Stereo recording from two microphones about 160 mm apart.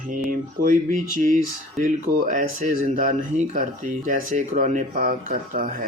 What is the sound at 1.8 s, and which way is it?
Speech, 55° right (ahead or behind).